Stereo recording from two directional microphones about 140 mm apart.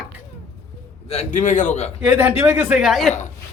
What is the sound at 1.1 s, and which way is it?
Speech, 55° left (ahead or behind).